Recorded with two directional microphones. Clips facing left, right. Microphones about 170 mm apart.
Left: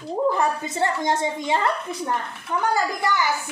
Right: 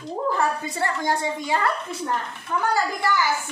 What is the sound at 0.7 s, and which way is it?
A woman's voice, 20° left (ahead or behind).